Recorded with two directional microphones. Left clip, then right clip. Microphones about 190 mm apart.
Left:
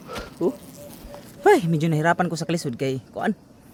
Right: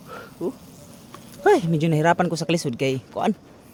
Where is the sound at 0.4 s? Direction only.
50° left (ahead or behind).